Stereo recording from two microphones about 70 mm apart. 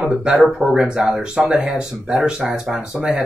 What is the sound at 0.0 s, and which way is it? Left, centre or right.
Speech, centre.